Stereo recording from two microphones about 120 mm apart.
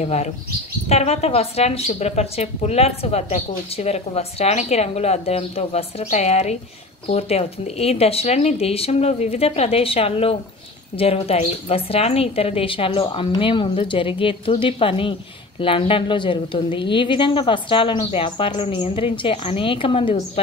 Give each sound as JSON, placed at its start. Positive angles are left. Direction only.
{"t": 0.0, "sound": "a woman's voice", "side_deg": 65}